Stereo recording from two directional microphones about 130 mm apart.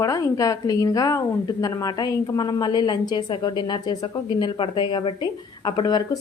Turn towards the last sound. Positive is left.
turn(degrees=35)  # may be behind; listen again after turning